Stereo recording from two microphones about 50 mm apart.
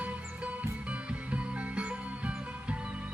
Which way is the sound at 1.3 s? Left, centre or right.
Right.